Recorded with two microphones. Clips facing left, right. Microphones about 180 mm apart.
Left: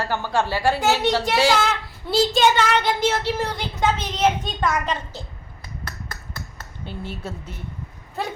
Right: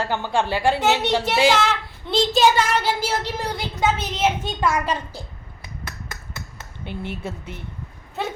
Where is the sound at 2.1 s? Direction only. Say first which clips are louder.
Even; 5° left (ahead or behind).